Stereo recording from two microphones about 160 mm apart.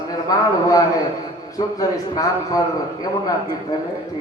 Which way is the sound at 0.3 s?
25° left (ahead or behind).